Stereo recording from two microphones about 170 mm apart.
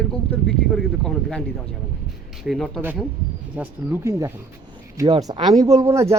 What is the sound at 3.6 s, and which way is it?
Speech, 15° right (ahead or behind).